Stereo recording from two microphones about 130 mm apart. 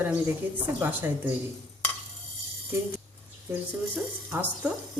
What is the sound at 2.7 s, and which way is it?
Speech, 15° right (ahead or behind).